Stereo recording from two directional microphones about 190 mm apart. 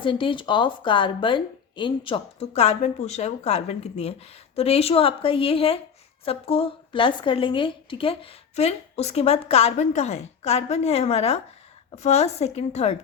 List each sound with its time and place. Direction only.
0.0 s a woman's voice: 25° left (ahead or behind)